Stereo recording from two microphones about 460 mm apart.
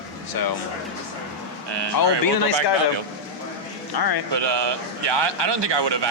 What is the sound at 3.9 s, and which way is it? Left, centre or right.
Speech, left.